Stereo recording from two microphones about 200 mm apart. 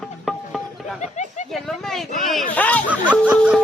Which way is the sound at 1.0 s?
35° left (ahead or behind).